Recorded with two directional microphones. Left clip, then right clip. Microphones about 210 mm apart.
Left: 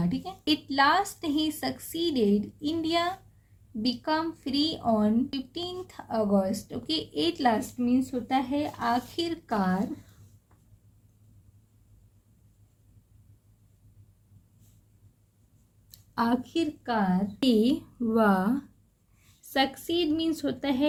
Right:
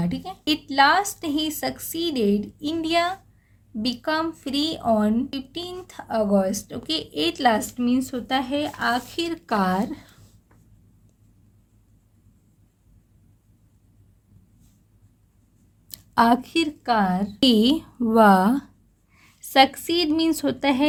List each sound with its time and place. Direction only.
0.0 s a woman's voice: 25° right (ahead or behind)
15.9 s speech: 45° right (ahead or behind)
16.9 s a woman's voice: 35° right (ahead or behind)
17.6 s a woman's voice: 45° right (ahead or behind)